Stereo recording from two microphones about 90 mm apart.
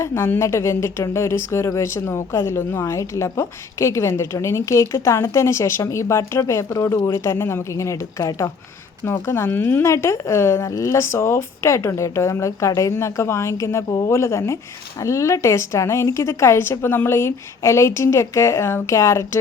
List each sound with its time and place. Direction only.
0.0 s speech: 30° left (ahead or behind)